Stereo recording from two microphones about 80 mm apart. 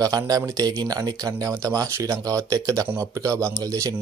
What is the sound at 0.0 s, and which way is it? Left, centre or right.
Speech, right.